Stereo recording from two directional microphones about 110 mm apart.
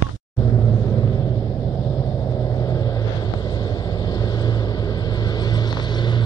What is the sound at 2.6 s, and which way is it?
Vehicle, 30° left (ahead or behind).